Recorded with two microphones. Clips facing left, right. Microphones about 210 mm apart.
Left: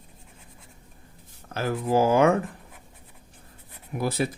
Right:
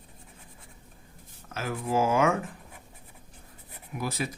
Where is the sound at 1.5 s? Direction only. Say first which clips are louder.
Left 6 dB; 35° left (ahead or behind).